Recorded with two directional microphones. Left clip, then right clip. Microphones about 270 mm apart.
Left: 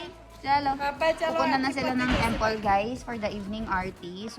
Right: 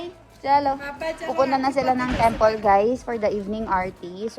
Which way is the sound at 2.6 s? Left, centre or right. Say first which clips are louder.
Right 7 dB; right.